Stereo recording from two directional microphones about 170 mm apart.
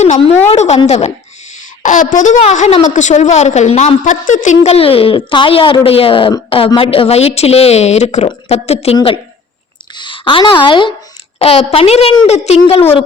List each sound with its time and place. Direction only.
0.0 s a woman's voice: 40° left (ahead or behind)